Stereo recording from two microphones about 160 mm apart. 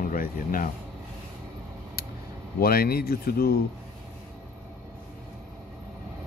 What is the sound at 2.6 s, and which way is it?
Speech, 70° left (ahead or behind).